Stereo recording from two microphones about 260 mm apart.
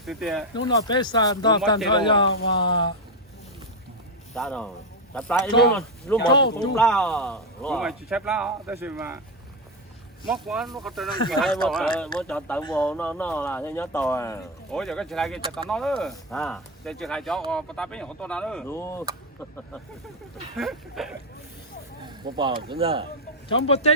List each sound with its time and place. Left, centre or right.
0.0 s speech: centre
0.5 s speech: centre
4.4 s speech: centre
6.2 s speech: centre
6.7 s speech: centre
10.2 s speech: centre
20.6 s speech: centre
22.3 s speech: centre
23.5 s speech: left